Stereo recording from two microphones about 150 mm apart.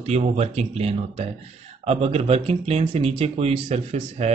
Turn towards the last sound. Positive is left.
turn(degrees=-45)  # may be behind; listen again after turning